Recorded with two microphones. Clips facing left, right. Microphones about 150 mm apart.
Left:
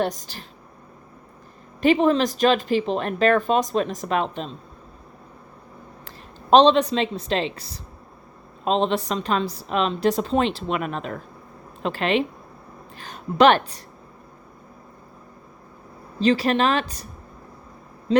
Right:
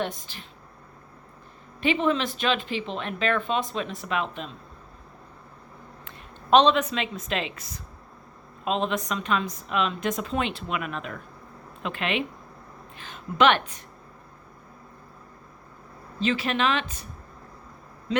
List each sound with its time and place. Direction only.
0.0 s speech: 40° left (ahead or behind)
1.8 s speech: 40° left (ahead or behind)
6.1 s speech: 35° left (ahead or behind)
16.2 s speech: 35° left (ahead or behind)
18.1 s speech: 30° left (ahead or behind)